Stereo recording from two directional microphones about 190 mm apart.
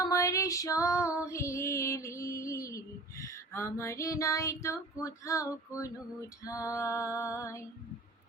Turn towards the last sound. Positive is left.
turn(degrees=15)  # may be behind; listen again after turning